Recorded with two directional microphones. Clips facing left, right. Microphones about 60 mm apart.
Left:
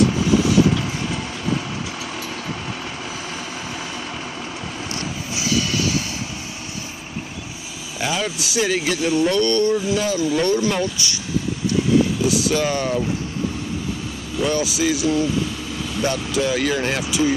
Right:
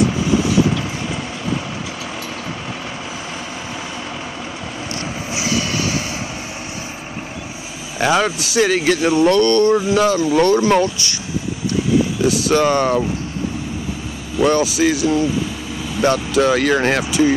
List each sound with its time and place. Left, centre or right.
5.3 s train: right
8.0 s speech: right
10.8 s speech: right
12.3 s speech: right
14.4 s speech: right